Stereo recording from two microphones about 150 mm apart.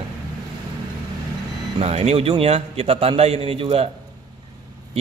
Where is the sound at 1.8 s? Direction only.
40° right (ahead or behind).